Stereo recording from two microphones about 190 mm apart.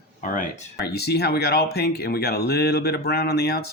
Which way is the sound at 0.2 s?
45° left (ahead or behind).